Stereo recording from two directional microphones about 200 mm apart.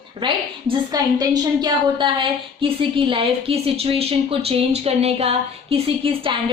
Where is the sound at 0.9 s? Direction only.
20° right (ahead or behind).